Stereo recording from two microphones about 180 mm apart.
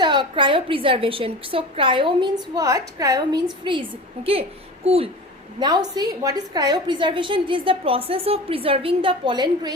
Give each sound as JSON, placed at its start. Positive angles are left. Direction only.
{"t": 0.0, "sound": "a woman's voice", "side_deg": -25}
{"t": 5.5, "sound": "a woman's voice", "side_deg": -20}